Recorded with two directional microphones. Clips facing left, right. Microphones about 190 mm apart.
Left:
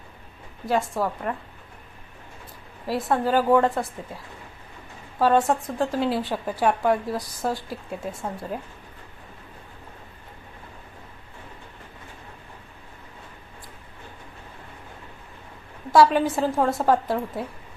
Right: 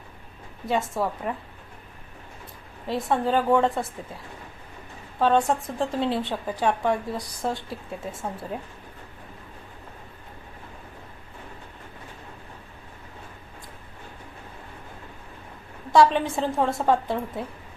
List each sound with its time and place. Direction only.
0.7 s speech: centre (ahead or behind)
2.8 s speech: 5° left (ahead or behind)
5.2 s speech: centre (ahead or behind)
15.9 s speech: 5° left (ahead or behind)